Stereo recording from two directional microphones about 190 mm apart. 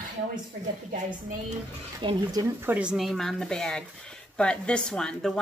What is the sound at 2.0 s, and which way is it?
Speech, 25° right (ahead or behind).